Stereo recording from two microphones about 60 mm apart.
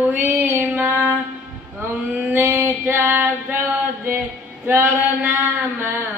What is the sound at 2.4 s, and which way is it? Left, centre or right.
Female singing, right.